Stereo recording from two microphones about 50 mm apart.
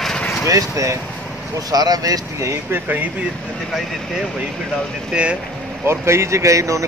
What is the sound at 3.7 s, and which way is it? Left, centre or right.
Speech, centre.